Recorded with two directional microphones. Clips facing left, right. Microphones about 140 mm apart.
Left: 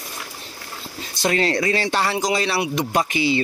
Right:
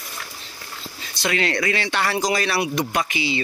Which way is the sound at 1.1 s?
40° left (ahead or behind).